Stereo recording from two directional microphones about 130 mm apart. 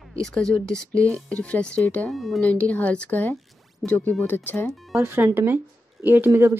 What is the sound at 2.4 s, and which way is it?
Speech, 10° left (ahead or behind).